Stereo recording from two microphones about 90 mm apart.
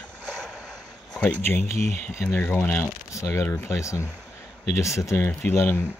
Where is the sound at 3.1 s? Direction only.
35° left (ahead or behind).